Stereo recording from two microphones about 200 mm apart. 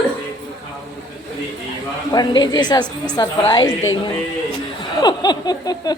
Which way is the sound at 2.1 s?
20° left (ahead or behind).